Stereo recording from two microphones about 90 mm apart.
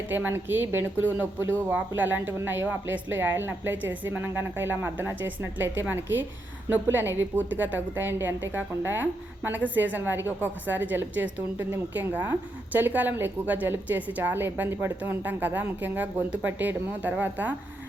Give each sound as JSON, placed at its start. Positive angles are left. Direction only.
{"t": 0.1, "sound": "a woman's voice", "side_deg": -20}
{"t": 2.0, "sound": "a woman's voice", "side_deg": -20}